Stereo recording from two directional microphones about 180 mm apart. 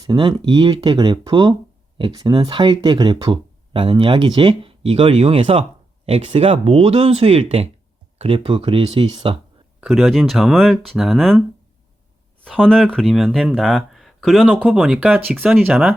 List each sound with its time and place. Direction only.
0.1 s speech: 25° right (ahead or behind)
9.8 s speech: centre (ahead or behind)
12.5 s speech: 5° left (ahead or behind)